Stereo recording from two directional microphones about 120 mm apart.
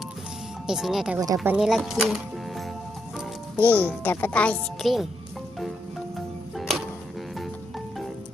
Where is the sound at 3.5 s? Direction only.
15° left (ahead or behind).